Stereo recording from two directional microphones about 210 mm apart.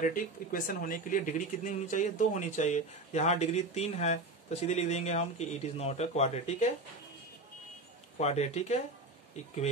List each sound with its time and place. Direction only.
0.0 s speech: 40° left (ahead or behind)
8.2 s speech: 30° left (ahead or behind)